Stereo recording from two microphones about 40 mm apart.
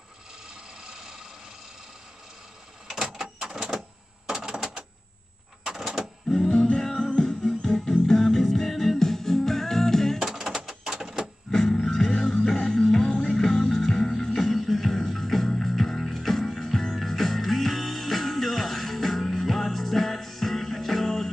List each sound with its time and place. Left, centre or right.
0.8 s vehicle: right
3.0 s printer: centre
4.3 s a sound: centre
6.2 s music: centre
10.1 s a sound: centre
11.5 s music: centre